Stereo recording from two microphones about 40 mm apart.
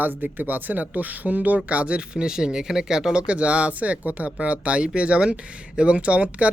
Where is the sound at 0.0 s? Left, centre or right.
Right.